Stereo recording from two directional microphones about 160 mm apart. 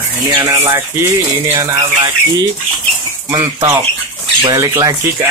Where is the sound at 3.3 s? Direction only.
25° right (ahead or behind).